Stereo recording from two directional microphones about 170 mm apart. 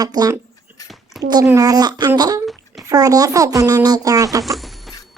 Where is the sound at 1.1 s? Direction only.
Centre (ahead or behind).